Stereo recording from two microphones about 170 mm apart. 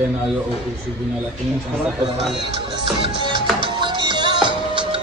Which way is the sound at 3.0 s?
30° right (ahead or behind).